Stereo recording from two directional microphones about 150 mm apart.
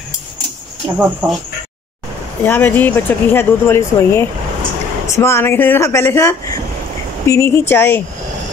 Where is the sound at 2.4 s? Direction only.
15° left (ahead or behind).